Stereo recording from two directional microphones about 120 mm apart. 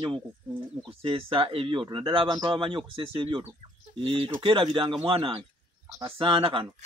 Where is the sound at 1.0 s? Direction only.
50° right (ahead or behind).